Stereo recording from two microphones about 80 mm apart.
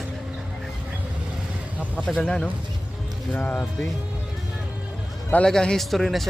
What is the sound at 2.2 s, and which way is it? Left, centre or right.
Speech, centre.